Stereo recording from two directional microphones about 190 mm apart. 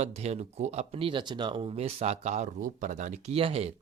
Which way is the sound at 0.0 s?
35° right (ahead or behind).